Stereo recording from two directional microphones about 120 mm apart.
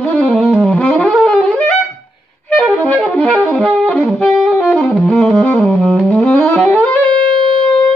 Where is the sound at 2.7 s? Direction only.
10° left (ahead or behind).